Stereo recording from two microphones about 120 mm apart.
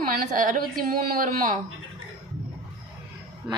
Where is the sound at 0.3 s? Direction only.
90° right.